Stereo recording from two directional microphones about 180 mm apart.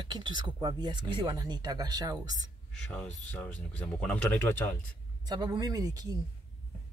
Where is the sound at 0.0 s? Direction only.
25° right (ahead or behind).